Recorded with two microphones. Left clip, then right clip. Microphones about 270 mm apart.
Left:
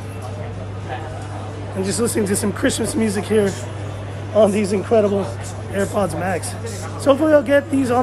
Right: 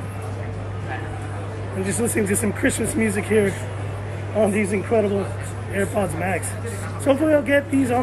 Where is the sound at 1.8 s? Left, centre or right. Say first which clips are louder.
Left 3 dB; centre.